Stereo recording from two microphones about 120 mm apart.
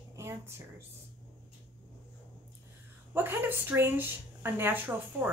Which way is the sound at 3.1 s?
20° right (ahead or behind).